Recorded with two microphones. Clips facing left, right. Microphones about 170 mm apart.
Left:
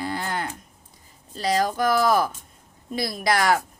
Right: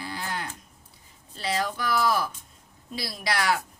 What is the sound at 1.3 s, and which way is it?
A woman's voice, 40° left (ahead or behind).